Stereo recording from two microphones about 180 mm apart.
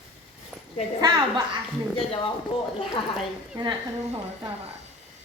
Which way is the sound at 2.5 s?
30° left (ahead or behind).